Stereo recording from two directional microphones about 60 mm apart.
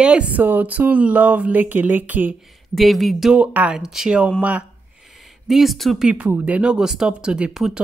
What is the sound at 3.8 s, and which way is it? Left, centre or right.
Speech, centre.